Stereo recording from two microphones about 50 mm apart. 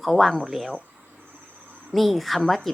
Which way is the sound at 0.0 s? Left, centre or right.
Centre.